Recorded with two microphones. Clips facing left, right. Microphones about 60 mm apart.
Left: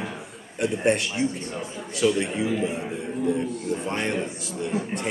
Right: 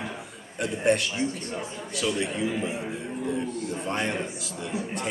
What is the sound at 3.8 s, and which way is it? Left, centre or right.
Speech, centre.